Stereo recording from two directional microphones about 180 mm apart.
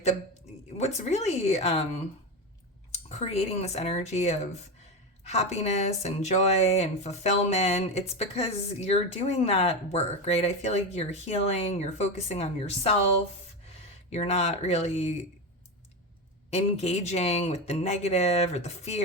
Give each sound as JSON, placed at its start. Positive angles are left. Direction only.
{"t": 0.8, "sound": "speech", "side_deg": 40}
{"t": 2.9, "sound": "speech", "side_deg": 35}
{"t": 14.1, "sound": "speech", "side_deg": 35}
{"t": 16.5, "sound": "speech", "side_deg": 35}